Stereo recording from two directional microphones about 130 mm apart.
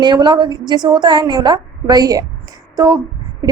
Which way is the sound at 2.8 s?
30° right (ahead or behind).